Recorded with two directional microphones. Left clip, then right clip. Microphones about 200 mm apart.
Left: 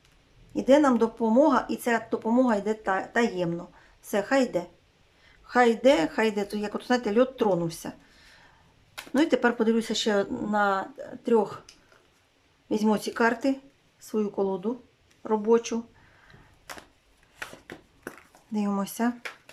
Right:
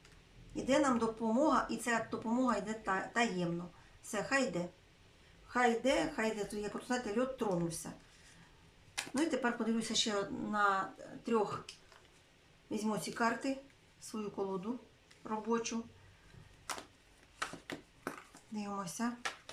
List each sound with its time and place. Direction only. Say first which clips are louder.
0.5 s speech: left 11 dB; 40° left (ahead or behind)
9.1 s speech: left 12 dB; 45° left (ahead or behind)
12.7 s speech: left 12 dB; 45° left (ahead or behind)
18.5 s speech: left 11 dB; 40° left (ahead or behind)